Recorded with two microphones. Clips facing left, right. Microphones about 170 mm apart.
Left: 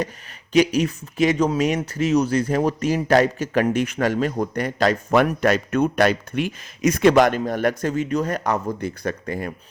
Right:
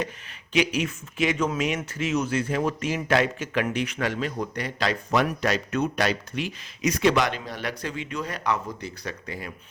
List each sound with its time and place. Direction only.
0.5 s speech: 40° left (ahead or behind)